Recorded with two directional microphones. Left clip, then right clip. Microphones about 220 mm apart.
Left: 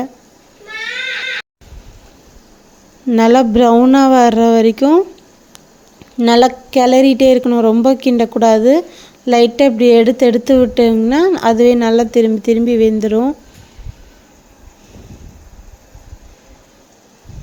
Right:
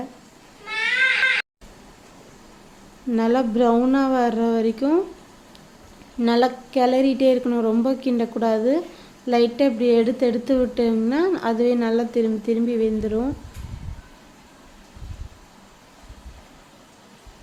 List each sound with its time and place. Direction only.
3.1 s a woman's voice: 35° left (ahead or behind)
6.1 s a woman's voice: 35° left (ahead or behind)